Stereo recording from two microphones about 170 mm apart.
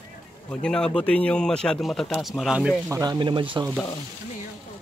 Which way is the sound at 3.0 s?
25° right (ahead or behind).